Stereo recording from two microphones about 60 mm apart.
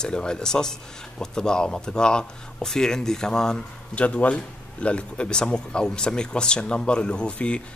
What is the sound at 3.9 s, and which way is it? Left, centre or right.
Speech, left.